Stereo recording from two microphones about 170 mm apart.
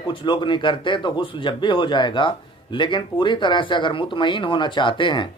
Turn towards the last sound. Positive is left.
turn(degrees=30)  # may be behind; listen again after turning